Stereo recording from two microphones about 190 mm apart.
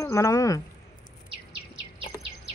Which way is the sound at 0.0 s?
15° left (ahead or behind).